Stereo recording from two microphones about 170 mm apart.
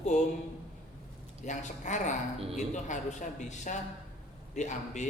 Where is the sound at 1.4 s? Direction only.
45° left (ahead or behind).